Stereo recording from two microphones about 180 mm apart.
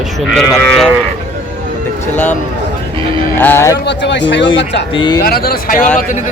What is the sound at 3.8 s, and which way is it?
Speech, 75° left (ahead or behind).